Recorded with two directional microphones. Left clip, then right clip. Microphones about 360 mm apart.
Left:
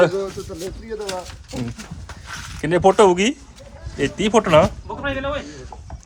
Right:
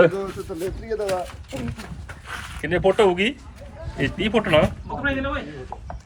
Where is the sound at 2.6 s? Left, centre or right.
Centre.